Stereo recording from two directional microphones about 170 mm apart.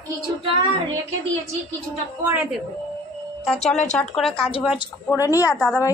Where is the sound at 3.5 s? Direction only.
5° left (ahead or behind).